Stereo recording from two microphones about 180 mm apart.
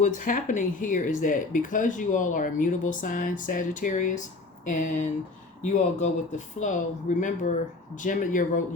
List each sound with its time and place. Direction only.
0.0 s speech: 45° left (ahead or behind)